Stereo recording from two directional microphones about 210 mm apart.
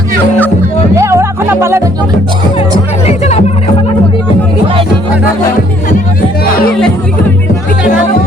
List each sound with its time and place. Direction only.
0.9 s music: 15° right (ahead or behind)
3.1 s music: 30° left (ahead or behind)
6.7 s music: 5° left (ahead or behind)